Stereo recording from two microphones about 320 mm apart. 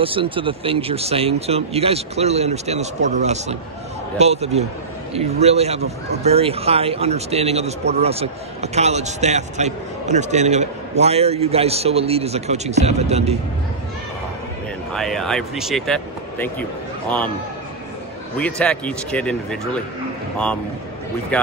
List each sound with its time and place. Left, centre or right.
0.0 s speech: centre
14.9 s speech: centre
18.4 s speech: centre
21.3 s speech: centre